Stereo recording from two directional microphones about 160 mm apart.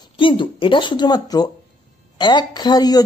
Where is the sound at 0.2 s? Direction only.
30° left (ahead or behind).